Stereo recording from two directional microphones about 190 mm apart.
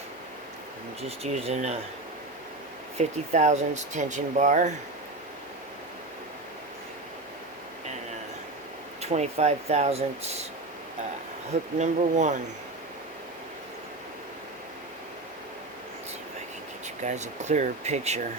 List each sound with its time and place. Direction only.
1.0 s speech: 30° right (ahead or behind)
3.0 s speech: 40° right (ahead or behind)
9.0 s speech: 35° right (ahead or behind)
11.8 s speech: 40° right (ahead or behind)
17.0 s speech: 40° right (ahead or behind)